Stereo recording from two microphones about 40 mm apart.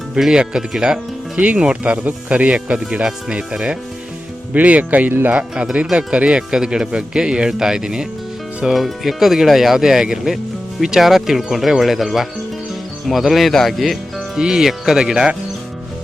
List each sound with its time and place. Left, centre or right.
0.2 s speech: centre
1.5 s speech: right
4.5 s speech: right
5.3 s speech: right
8.7 s speech: centre
14.3 s speech: centre